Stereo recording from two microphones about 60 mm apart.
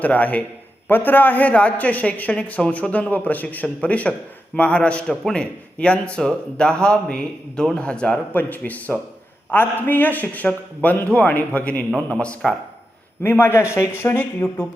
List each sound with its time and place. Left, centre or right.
0.0 s a man's voice: left
8.3 s a man's voice: left
13.2 s speech: left